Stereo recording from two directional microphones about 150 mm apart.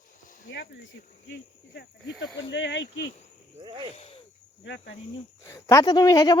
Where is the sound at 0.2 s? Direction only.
60° left (ahead or behind).